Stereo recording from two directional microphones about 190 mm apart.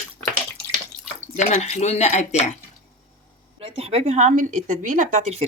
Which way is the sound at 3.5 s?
30° right (ahead or behind).